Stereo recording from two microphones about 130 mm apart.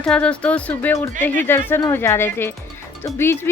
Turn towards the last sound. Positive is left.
turn(degrees=20)  # may be behind; listen again after turning